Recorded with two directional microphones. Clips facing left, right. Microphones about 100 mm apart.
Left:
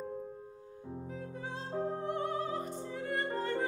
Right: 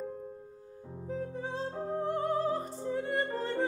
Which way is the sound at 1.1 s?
30° right (ahead or behind).